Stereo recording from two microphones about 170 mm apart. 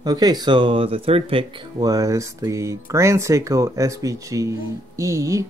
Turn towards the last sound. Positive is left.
turn(degrees=-20)  # may be behind; listen again after turning